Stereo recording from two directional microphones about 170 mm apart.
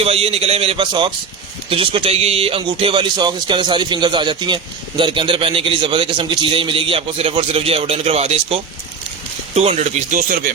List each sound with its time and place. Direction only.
0.0 s speech: 35° right (ahead or behind); by 10.5 s 55° right (ahead or behind)